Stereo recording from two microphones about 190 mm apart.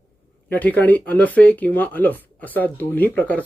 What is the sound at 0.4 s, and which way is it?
Speech, 10° left (ahead or behind).